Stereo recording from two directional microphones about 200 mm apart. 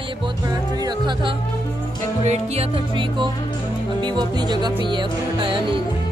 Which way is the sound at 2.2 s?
35° right (ahead or behind).